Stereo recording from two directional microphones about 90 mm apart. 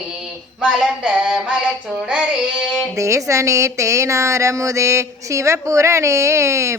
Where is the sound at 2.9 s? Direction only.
35° right (ahead or behind).